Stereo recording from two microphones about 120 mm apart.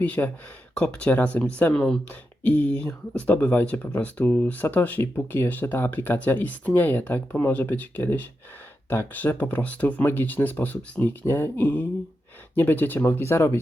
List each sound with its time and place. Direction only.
0.0 s speech: 10° left (ahead or behind)